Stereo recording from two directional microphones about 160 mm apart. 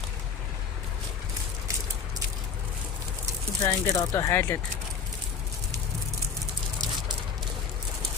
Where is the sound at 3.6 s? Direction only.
20° left (ahead or behind).